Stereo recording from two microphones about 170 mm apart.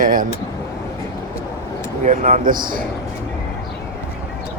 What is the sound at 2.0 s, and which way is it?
Speech, 45° right (ahead or behind).